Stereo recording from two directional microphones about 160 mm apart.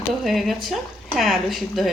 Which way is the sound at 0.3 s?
Centre (ahead or behind).